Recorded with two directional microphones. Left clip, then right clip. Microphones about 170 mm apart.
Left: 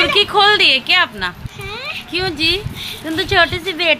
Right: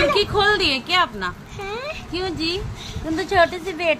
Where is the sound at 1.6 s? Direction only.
50° right (ahead or behind).